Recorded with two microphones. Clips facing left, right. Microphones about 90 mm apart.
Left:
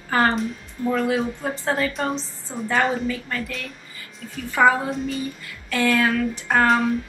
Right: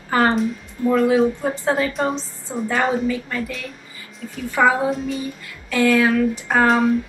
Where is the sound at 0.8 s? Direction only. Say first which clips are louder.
Right 6 dB; 5° right (ahead or behind).